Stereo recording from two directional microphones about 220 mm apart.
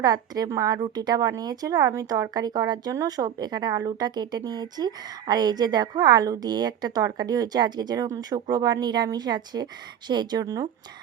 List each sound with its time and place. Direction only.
0.0 s a woman's voice: 15° right (ahead or behind)